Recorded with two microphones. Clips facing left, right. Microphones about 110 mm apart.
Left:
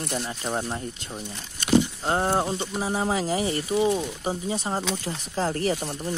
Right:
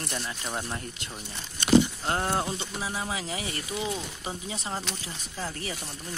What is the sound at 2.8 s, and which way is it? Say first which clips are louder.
Speech: left 10 dB; 40° left (ahead or behind).